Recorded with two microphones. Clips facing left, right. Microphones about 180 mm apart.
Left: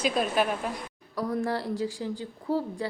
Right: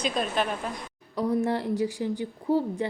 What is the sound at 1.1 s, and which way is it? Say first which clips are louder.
A woman's voice: right 3 dB; 20° right (ahead or behind).